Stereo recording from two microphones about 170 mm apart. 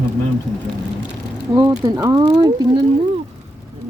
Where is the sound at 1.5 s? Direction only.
20° right (ahead or behind).